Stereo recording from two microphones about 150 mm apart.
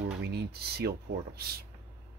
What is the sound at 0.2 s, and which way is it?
Speech, 90° right.